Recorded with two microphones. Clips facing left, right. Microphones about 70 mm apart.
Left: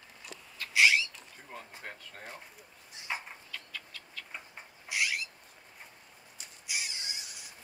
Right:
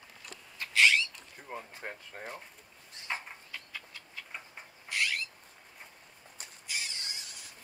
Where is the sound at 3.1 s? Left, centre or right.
Centre.